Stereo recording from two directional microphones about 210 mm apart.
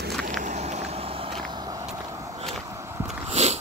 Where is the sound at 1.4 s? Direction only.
20° right (ahead or behind).